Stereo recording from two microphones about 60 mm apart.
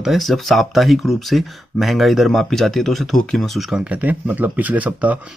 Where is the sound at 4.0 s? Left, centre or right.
Right.